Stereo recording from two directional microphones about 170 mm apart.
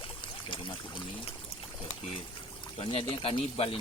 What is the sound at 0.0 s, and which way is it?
Speech, 30° left (ahead or behind).